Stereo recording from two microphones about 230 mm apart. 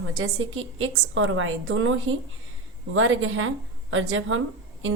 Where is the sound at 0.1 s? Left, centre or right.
Right.